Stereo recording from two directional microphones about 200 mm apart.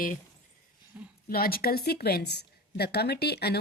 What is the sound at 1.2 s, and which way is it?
A woman's voice, 50° left (ahead or behind).